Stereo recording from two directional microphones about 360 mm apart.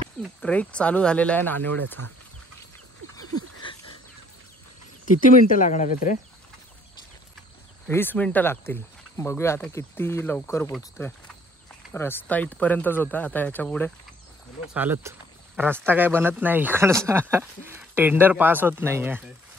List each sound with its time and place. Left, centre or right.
0.2 s speech: centre
3.2 s a sound: right
5.2 s speech: left
7.9 s speech: centre